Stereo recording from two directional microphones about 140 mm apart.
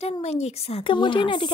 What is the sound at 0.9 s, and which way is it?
Speech, 35° left (ahead or behind).